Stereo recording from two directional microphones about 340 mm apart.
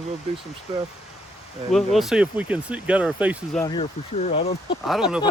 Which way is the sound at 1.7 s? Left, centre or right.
Centre.